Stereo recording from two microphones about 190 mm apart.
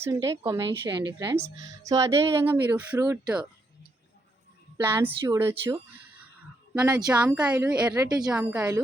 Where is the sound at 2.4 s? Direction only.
10° right (ahead or behind).